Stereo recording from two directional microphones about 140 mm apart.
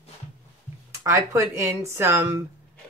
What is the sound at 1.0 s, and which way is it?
Speech, 20° right (ahead or behind).